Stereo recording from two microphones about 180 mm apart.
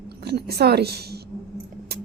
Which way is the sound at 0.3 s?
65° right (ahead or behind).